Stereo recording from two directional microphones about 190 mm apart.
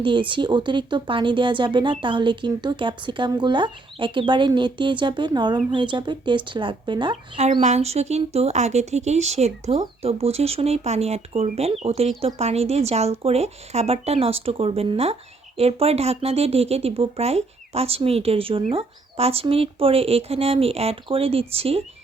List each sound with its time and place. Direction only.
0.0 s speech: 25° right (ahead or behind)